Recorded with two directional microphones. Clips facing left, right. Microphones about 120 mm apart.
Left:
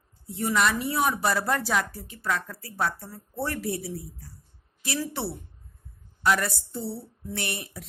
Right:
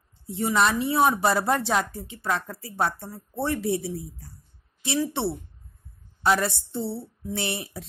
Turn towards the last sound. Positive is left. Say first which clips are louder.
# right 4 dB
turn(degrees=-25)  # may be behind; listen again after turning